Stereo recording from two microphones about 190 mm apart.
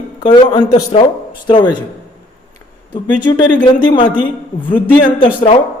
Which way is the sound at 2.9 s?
25° left (ahead or behind).